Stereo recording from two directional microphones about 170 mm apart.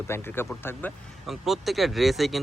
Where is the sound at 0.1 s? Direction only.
15° left (ahead or behind).